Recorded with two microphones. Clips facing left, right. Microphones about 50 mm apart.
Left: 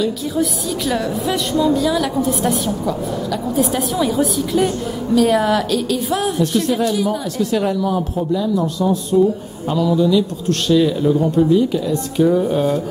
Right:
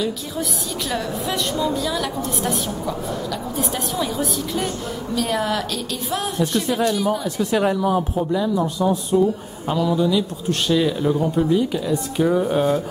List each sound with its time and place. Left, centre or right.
0.0 s a woman's voice: centre
7.3 s speech: centre